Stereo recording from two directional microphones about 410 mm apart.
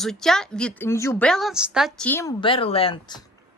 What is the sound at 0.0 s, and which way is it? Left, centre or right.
Speech, centre.